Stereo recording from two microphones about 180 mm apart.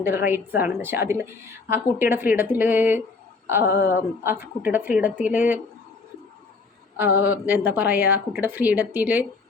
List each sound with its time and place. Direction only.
0.0 s a woman's voice: 10° right (ahead or behind)
3.7 s speech: 60° left (ahead or behind)
4.2 s a woman's voice: 10° right (ahead or behind)
6.9 s a woman's voice: 10° right (ahead or behind)